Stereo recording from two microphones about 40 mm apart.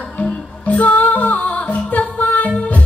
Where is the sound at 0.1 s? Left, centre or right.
Left.